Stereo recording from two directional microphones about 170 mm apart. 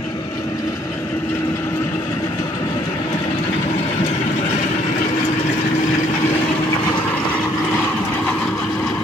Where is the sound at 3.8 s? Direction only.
35° left (ahead or behind).